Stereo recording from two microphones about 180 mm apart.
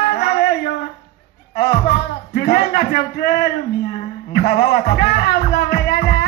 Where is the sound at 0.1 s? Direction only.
65° left (ahead or behind).